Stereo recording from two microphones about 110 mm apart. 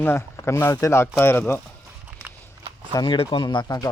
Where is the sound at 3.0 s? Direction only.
50° left (ahead or behind).